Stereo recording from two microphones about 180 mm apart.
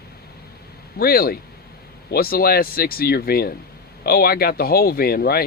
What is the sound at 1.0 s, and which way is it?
Speech, 55° left (ahead or behind).